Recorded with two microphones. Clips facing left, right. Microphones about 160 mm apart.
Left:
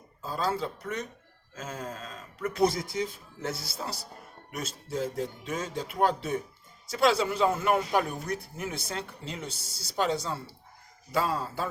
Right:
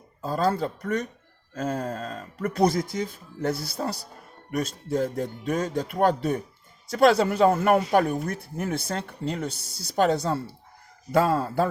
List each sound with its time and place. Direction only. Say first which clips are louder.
0.2 s a man's voice: right 6 dB; 50° right (ahead or behind)